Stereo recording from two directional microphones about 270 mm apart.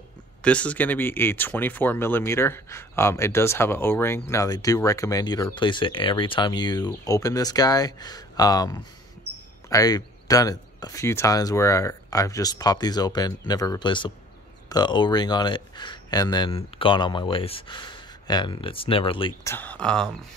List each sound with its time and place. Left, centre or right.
0.4 s speech: centre
19.5 s speech: centre